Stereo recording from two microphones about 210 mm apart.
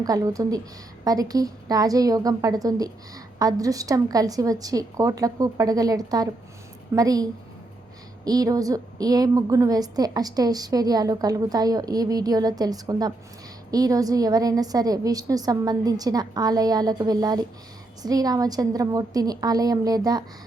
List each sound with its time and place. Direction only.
0.0 s a woman's voice: 15° right (ahead or behind)